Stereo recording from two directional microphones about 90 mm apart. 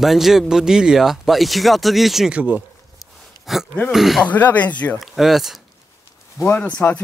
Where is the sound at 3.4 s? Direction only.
Centre (ahead or behind).